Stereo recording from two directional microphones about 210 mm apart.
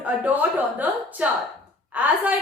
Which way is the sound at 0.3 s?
5° right (ahead or behind).